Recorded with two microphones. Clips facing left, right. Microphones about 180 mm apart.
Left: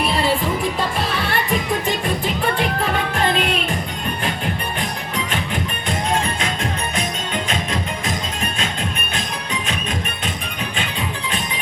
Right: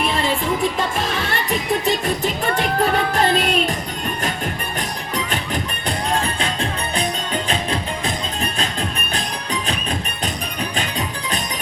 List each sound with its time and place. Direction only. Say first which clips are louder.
1.8 s music: right 2 dB; 40° right (ahead or behind)
4.8 s music: even; 40° right (ahead or behind)